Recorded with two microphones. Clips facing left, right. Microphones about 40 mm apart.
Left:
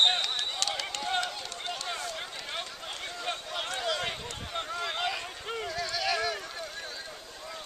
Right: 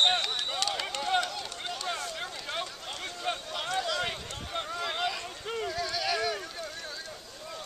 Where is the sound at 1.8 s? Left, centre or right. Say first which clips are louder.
Right 1 dB; centre.